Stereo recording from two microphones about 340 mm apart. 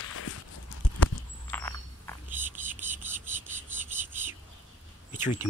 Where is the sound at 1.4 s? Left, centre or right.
Centre.